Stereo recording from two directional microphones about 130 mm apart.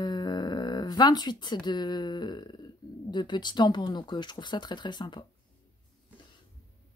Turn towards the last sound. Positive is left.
turn(degrees=35)  # may be behind; listen again after turning